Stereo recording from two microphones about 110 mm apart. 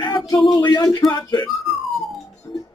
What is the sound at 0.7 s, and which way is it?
Speech, 35° left (ahead or behind).